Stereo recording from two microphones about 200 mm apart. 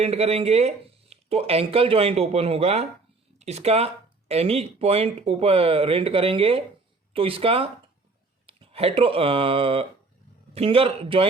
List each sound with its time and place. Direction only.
0.0 s speech: 30° right (ahead or behind)